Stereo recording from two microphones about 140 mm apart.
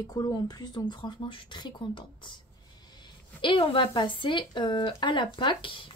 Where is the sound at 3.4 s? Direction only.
40° left (ahead or behind).